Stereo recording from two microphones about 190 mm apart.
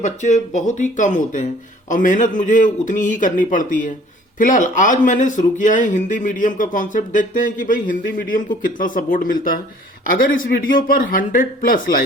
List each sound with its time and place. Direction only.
0.0 s speech: 40° left (ahead or behind)